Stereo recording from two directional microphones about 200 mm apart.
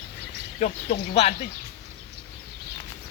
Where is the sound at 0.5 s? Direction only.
35° left (ahead or behind).